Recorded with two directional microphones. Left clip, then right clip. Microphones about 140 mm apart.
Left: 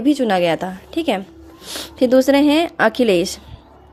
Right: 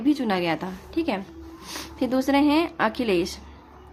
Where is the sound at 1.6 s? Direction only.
35° left (ahead or behind).